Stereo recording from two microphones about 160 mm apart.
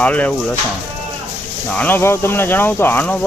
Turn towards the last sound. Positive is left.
turn(degrees=10)  # may be behind; listen again after turning